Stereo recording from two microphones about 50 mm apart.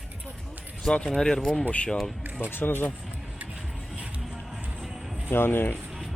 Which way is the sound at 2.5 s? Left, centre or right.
Left.